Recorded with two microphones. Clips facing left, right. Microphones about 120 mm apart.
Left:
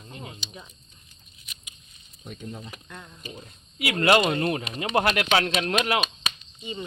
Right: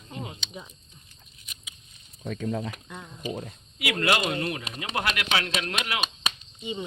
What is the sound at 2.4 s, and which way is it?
Speech, 90° right.